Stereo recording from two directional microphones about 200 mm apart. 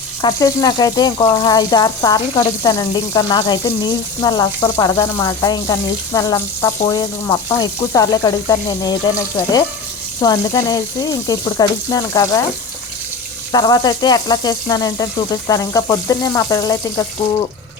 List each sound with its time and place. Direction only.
0.2 s speech: 20° left (ahead or behind)
13.5 s speech: 20° left (ahead or behind)